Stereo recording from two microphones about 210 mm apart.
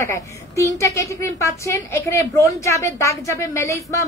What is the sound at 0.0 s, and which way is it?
A woman's voice, 15° left (ahead or behind).